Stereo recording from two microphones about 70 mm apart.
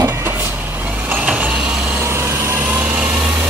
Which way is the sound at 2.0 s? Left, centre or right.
Right.